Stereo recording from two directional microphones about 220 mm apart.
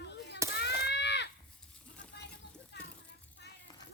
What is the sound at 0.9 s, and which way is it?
Livestock, 50° left (ahead or behind).